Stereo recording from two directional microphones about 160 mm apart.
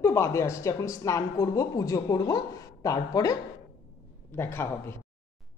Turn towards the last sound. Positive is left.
turn(degrees=15)  # may be behind; listen again after turning